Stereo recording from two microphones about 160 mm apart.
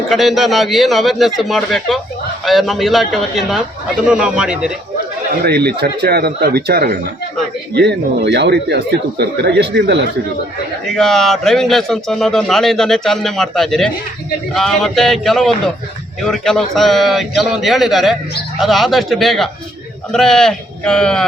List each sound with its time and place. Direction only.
0.1 s a man's voice: centre (ahead or behind)
5.4 s speech: 85° right
7.7 s speech: 90° right
10.8 s a man's voice: 5° left (ahead or behind)